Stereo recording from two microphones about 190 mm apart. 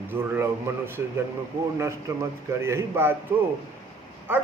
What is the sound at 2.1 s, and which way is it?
Mantra, 15° right (ahead or behind).